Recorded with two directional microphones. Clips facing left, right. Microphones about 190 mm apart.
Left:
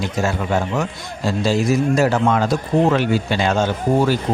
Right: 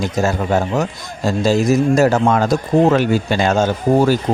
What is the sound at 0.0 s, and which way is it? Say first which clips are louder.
A man's voice: right 3 dB; 40° right (ahead or behind).